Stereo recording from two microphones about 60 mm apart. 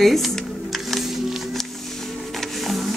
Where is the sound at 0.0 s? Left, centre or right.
Centre.